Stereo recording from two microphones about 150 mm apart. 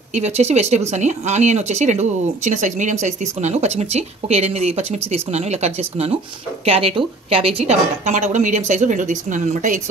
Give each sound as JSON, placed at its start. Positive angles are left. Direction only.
{"t": 0.1, "sound": "speech", "side_deg": -50}